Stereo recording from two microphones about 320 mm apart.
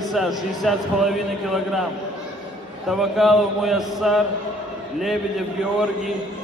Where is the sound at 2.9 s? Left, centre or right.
Centre.